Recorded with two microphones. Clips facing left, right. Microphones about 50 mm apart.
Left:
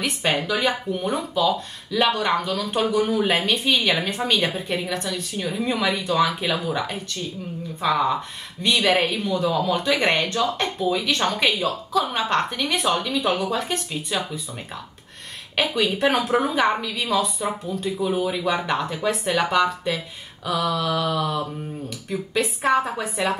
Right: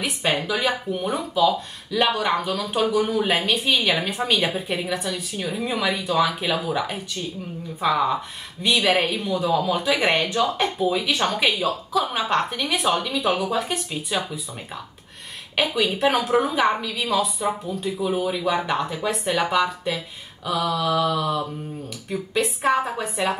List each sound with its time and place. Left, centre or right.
0.0 s speech: centre
15.5 s speech: centre